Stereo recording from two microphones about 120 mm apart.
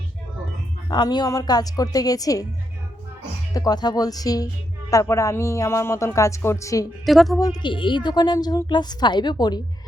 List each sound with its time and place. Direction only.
0.9 s a woman's voice: 35° left (ahead or behind)
3.5 s a woman's voice: 30° left (ahead or behind)
7.0 s a woman's voice: centre (ahead or behind)
7.6 s a woman's voice: 40° left (ahead or behind)